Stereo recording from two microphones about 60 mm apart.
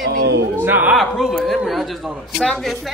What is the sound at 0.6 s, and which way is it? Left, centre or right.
Speech, right.